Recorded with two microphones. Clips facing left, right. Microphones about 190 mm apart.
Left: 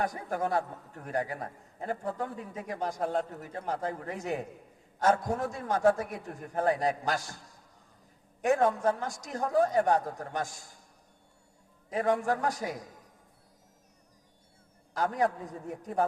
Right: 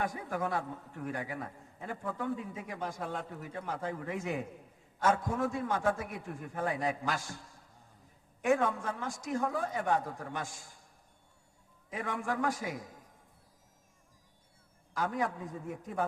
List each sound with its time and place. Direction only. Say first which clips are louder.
0.0 s a man's voice: left 3 dB; 40° left (ahead or behind)
8.4 s a man's voice: left 3 dB; 40° left (ahead or behind)
11.9 s a man's voice: left 8 dB; 40° left (ahead or behind)
14.9 s a man's voice: left 5 dB; 40° left (ahead or behind)